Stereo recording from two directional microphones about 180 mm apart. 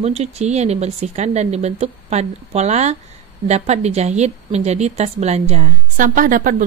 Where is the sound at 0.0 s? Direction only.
35° right (ahead or behind).